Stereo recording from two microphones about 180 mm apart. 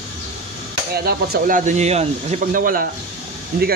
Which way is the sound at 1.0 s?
55° right (ahead or behind).